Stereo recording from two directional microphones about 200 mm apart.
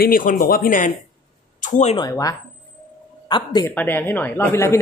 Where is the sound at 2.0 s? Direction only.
20° left (ahead or behind).